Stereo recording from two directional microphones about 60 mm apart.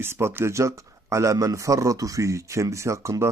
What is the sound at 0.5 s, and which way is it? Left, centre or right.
Speech, right.